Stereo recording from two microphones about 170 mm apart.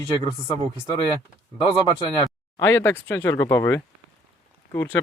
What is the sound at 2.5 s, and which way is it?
Speech, 15° left (ahead or behind).